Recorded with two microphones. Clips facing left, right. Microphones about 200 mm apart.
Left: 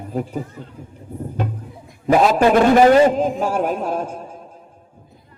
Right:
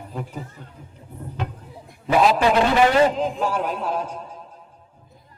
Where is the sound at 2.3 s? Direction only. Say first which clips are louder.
Left 6 dB; 45° left (ahead or behind).